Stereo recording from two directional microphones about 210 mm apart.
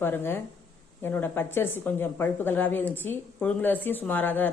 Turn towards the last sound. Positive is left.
turn(degrees=10)  # may be behind; listen again after turning